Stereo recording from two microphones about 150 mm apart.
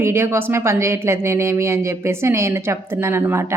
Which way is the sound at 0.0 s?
15° right (ahead or behind).